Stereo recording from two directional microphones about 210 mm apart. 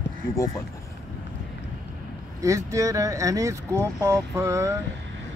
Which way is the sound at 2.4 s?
15° right (ahead or behind).